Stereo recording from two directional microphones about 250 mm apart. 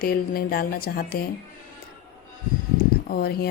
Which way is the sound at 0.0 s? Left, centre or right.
Left.